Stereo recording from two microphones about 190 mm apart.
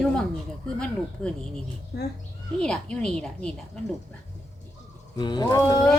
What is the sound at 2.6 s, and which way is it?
Speech, 5° left (ahead or behind).